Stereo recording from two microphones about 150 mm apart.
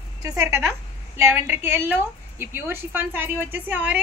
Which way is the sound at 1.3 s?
15° right (ahead or behind).